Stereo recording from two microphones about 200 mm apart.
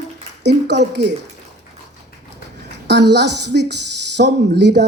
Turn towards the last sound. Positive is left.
turn(degrees=-60)  # may be behind; listen again after turning